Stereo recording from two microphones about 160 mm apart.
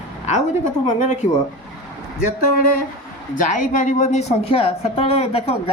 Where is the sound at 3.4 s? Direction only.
50° left (ahead or behind).